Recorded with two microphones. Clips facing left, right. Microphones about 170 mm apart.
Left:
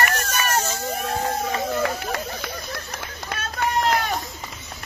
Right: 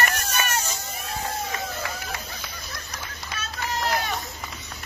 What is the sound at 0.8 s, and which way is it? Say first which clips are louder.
Vehicle: left 9 dB; 60° left (ahead or behind).